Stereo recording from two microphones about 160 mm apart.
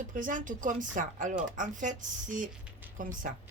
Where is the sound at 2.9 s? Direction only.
55° right (ahead or behind).